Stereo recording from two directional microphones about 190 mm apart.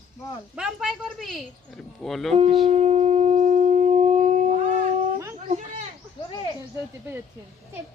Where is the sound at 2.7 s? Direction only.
35° right (ahead or behind).